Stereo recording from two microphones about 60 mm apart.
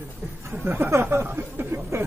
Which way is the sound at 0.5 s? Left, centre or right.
Right.